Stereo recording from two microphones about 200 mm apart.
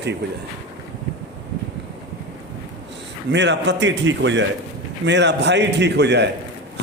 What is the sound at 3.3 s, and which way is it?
A man's voice, 60° right (ahead or behind).